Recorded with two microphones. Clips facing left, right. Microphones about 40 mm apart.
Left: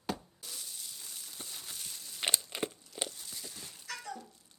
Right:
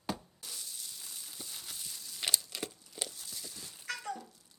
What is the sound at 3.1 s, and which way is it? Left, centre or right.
Biting, centre.